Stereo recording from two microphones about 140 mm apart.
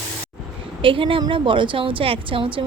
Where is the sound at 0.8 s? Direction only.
40° right (ahead or behind).